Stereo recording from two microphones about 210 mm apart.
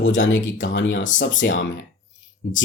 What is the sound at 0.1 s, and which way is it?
Speech, 65° left (ahead or behind).